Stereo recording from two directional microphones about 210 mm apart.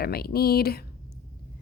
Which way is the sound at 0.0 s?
45° left (ahead or behind).